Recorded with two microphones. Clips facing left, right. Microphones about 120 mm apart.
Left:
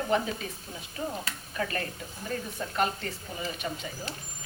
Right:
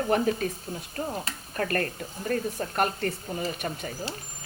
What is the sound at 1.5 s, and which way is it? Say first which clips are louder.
Speech: right 5 dB; 50° right (ahead or behind).